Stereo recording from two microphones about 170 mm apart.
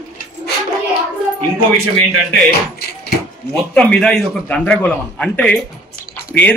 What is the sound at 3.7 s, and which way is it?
A man's voice, 5° left (ahead or behind).